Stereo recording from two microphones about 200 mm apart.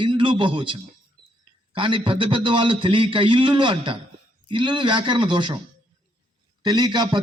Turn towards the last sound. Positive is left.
turn(degrees=-20)  # may be behind; listen again after turning